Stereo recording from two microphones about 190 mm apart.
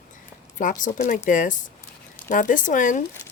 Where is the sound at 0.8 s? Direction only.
40° left (ahead or behind).